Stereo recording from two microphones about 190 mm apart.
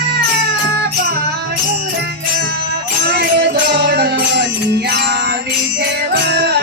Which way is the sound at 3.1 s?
65° right (ahead or behind).